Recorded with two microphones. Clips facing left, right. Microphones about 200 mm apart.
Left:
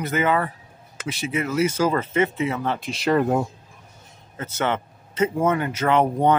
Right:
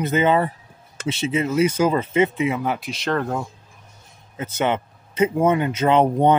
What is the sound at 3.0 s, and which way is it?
Speech, 15° left (ahead or behind).